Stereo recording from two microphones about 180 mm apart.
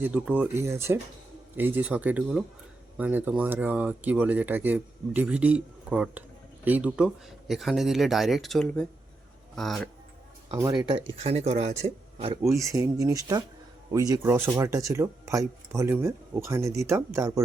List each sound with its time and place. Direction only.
0.0 s speech: 10° right (ahead or behind)
10.5 s speech: 20° right (ahead or behind)
11.2 s speech: 35° right (ahead or behind)
12.5 s speech: 15° right (ahead or behind)